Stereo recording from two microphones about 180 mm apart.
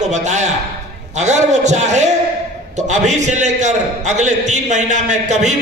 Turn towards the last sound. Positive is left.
turn(degrees=-40)  # may be behind; listen again after turning